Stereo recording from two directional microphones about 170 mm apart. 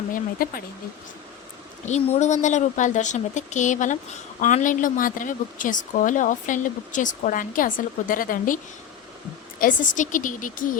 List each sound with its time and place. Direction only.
0.1 s speech: 55° left (ahead or behind)
1.9 s speech: 45° left (ahead or behind)
9.6 s speech: 50° left (ahead or behind)